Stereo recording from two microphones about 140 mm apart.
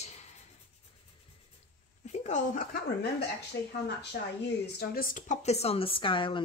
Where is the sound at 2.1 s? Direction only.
55° left (ahead or behind); by 2.8 s 75° left (ahead or behind).